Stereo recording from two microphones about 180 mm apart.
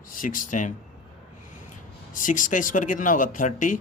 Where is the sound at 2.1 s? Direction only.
45° left (ahead or behind).